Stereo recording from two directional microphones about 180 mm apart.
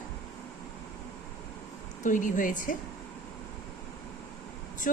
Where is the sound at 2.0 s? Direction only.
45° left (ahead or behind).